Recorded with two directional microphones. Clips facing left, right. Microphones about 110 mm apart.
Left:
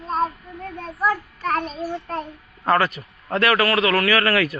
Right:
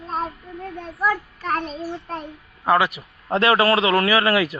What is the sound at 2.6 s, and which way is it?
Speech, 10° right (ahead or behind).